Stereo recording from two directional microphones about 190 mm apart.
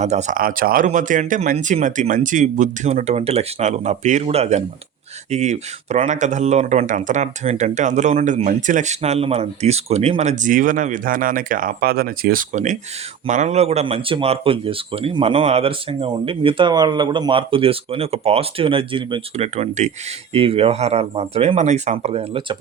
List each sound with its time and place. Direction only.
0.0 s speech: 40° right (ahead or behind)